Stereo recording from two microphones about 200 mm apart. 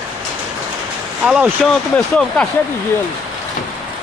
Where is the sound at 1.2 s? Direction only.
5° right (ahead or behind).